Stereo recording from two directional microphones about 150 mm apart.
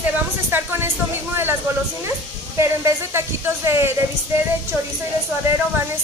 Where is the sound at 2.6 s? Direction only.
15° right (ahead or behind).